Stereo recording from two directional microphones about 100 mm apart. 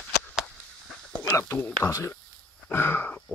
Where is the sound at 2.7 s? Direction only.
20° left (ahead or behind).